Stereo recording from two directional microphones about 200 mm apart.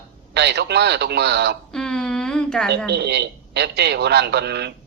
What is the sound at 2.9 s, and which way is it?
Speech, 55° right (ahead or behind).